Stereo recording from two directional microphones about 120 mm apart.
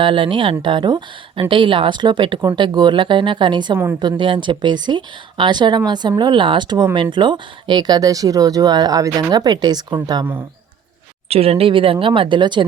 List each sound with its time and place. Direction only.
0.0 s speech: 45° right (ahead or behind)
11.3 s speech: 55° right (ahead or behind)